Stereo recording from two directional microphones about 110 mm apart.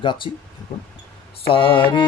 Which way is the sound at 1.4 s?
55° left (ahead or behind).